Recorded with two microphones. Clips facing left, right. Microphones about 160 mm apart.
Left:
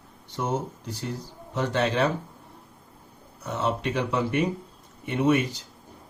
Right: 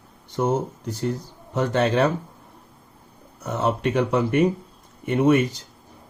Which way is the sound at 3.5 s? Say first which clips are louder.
Right 4 dB; 45° right (ahead or behind).